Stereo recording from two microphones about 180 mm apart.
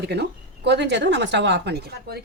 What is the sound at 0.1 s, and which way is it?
Speech, 70° right (ahead or behind).